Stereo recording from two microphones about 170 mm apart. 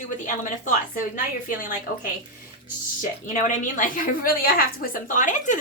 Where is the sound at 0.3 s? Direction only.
50° left (ahead or behind).